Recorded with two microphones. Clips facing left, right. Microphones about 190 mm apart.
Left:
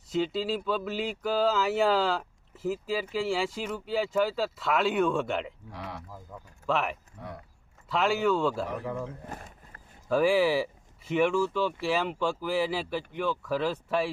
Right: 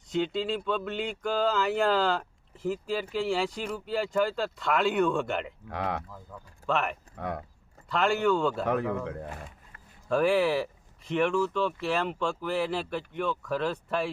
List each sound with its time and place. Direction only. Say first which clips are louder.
0.1 s speech: even; 5° left (ahead or behind)
5.6 s speech: right 8 dB; 60° right (ahead or behind)
6.3 s speech: left 1 dB; 20° left (ahead or behind)
6.7 s speech: even; centre (ahead or behind)
7.2 s a man's voice: right 8 dB; 70° right (ahead or behind)
7.9 s speech: right 1 dB; centre (ahead or behind)
8.6 s a man's voice: right 5 dB; 70° right (ahead or behind)
10.1 s speech: left 1 dB; 5° left (ahead or behind)